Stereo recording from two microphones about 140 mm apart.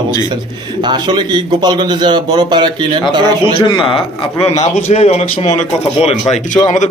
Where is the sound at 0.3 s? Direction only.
30° right (ahead or behind).